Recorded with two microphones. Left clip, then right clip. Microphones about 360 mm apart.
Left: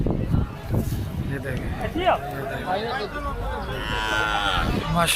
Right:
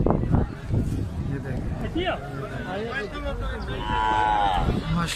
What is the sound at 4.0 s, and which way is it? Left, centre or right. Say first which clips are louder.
Cattle: right 2 dB; right.